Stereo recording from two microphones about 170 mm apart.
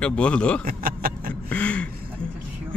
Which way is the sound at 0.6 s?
60° right (ahead or behind).